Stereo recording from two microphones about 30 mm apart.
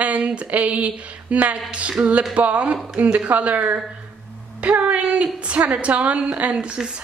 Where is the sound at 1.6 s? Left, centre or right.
Right.